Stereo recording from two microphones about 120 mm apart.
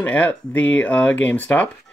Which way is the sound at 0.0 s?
15° left (ahead or behind).